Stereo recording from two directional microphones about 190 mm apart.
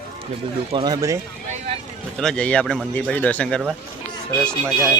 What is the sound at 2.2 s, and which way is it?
A man's voice, 5° left (ahead or behind).